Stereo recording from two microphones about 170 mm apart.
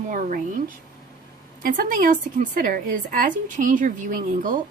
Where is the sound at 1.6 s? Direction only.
55° right (ahead or behind).